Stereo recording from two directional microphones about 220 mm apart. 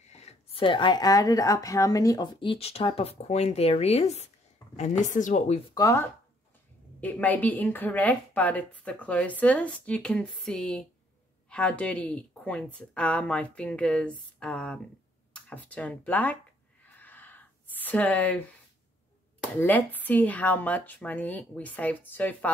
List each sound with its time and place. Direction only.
0.1 s speech: 30° left (ahead or behind)
5.8 s a woman's voice: 15° left (ahead or behind)
16.8 s a sound: 10° left (ahead or behind)
19.6 s a woman's voice: 10° left (ahead or behind)